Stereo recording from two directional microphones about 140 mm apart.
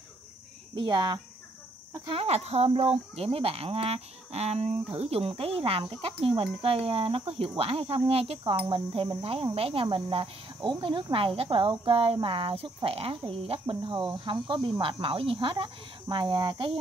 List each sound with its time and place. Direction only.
0.7 s cricket: 35° right (ahead or behind)
2.0 s speech: 45° right (ahead or behind)
8.6 s cricket: 40° right (ahead or behind)